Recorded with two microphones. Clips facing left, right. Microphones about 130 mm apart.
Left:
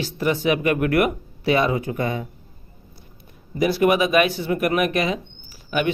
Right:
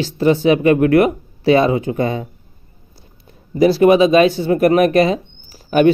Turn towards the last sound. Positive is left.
turn(degrees=-40)  # may be behind; listen again after turning